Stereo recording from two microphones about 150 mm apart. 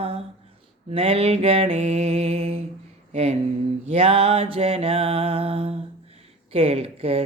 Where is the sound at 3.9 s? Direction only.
40° right (ahead or behind).